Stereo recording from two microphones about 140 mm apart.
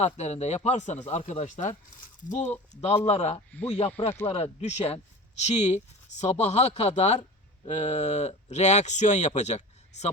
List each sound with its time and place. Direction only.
0.0 s speech: 50° left (ahead or behind)
1.2 s speech: 45° left (ahead or behind)
1.5 s speech: 60° left (ahead or behind)
2.8 s speech: 45° left (ahead or behind)